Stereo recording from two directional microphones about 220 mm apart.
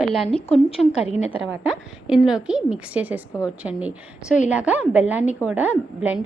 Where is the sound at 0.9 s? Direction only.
30° left (ahead or behind).